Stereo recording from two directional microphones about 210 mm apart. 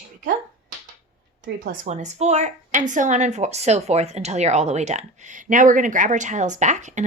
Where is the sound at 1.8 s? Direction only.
35° right (ahead or behind).